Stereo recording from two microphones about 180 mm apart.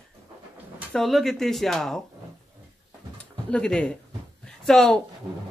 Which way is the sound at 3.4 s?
5° left (ahead or behind).